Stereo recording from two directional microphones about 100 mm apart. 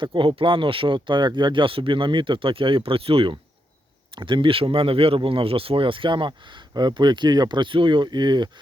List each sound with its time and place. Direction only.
0.0 s speech: 60° right (ahead or behind)
4.1 s speech: 55° right (ahead or behind)